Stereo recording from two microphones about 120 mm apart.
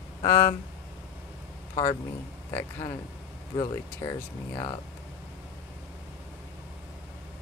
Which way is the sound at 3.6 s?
30° left (ahead or behind).